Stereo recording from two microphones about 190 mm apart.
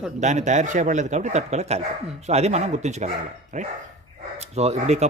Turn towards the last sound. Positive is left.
turn(degrees=-35)  # may be behind; listen again after turning